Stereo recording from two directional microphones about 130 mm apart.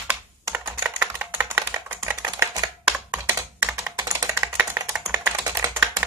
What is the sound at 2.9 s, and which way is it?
Computer keyboard, 15° right (ahead or behind).